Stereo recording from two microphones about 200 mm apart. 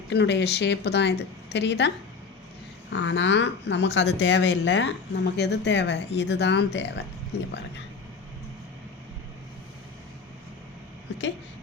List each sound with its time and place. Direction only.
0.1 s speech: 60° left (ahead or behind)
2.9 s speech: 65° left (ahead or behind)